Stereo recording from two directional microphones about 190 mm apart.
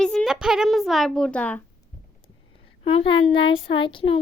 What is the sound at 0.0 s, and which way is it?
Speech, 5° left (ahead or behind).